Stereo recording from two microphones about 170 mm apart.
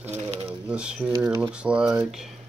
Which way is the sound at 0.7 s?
5° right (ahead or behind).